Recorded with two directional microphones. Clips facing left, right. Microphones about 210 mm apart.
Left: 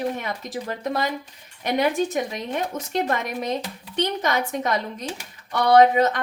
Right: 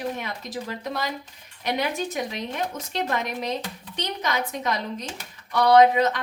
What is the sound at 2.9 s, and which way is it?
A woman's voice, 50° left (ahead or behind).